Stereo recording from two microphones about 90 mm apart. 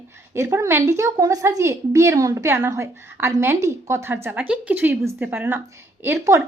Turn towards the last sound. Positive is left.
turn(degrees=-30)  # may be behind; listen again after turning